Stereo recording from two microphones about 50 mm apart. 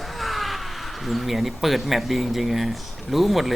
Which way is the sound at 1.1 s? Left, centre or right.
Centre.